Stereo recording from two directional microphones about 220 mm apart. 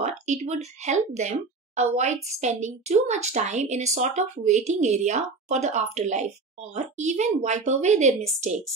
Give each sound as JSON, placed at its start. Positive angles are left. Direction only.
{"t": 0.0, "sound": "a woman's voice", "side_deg": -30}